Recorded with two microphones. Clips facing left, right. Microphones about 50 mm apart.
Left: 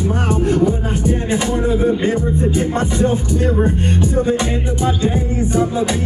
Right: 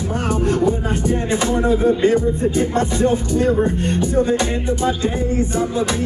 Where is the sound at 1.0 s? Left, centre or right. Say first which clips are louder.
Left 1 dB; left.